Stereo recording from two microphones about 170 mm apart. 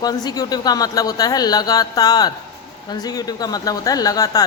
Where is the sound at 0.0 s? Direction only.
25° left (ahead or behind).